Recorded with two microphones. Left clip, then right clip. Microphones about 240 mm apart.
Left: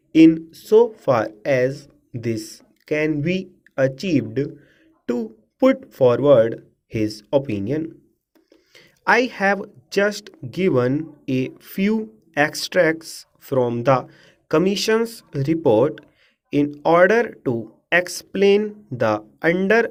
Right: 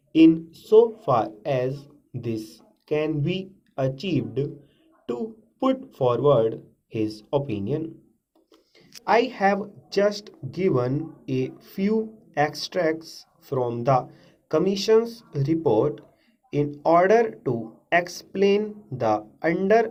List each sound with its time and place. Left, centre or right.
0.1 s speech: left
14.1 s a sound: left
14.5 s speech: left
16.8 s speech: left